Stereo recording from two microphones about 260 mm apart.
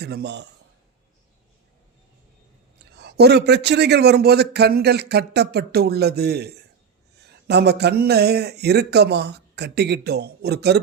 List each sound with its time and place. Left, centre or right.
0.0 s a man's voice: right
3.0 s a man's voice: right